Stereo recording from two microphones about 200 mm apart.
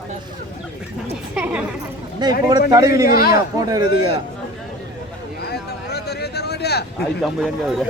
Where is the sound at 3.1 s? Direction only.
50° left (ahead or behind).